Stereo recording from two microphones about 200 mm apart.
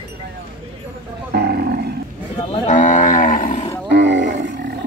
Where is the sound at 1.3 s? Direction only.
50° right (ahead or behind).